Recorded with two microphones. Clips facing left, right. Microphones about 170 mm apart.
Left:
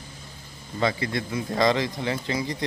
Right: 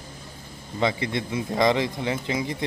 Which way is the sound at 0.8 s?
20° right (ahead or behind).